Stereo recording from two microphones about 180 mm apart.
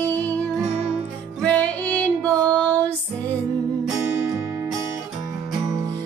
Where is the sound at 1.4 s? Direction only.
5° left (ahead or behind).